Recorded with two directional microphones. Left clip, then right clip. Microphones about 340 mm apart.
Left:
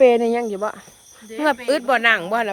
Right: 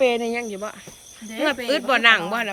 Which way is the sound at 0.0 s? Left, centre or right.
Left.